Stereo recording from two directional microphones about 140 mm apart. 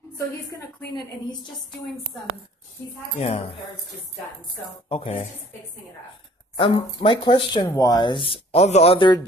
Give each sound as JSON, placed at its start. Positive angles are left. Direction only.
{"t": 0.9, "sound": "a man's voice", "side_deg": 35}
{"t": 2.1, "sound": "a woman's voice", "side_deg": 5}
{"t": 3.2, "sound": "speech", "side_deg": 45}
{"t": 4.8, "sound": "speech", "side_deg": 45}
{"t": 6.5, "sound": "a man's voice", "side_deg": 40}
{"t": 7.6, "sound": "a man's voice", "side_deg": 25}